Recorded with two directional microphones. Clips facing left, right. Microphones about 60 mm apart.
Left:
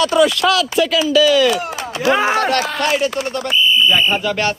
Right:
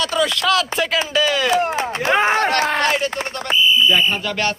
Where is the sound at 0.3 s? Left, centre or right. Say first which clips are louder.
Left 2 dB; right.